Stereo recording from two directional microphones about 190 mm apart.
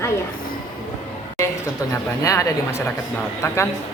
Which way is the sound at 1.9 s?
15° left (ahead or behind).